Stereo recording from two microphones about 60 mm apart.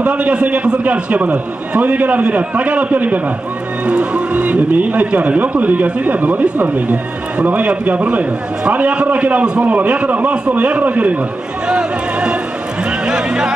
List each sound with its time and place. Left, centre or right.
0.0 s speech: centre